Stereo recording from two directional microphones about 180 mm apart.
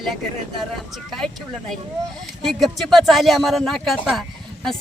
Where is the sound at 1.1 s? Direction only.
Centre (ahead or behind).